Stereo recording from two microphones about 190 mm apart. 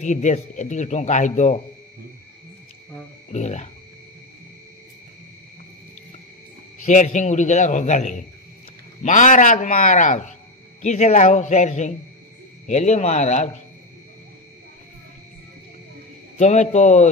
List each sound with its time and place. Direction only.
0.0 s a man's voice: 40° left (ahead or behind)
3.3 s frog: 40° left (ahead or behind)
6.9 s a man's voice: 40° left (ahead or behind)
16.3 s a man's voice: 40° left (ahead or behind)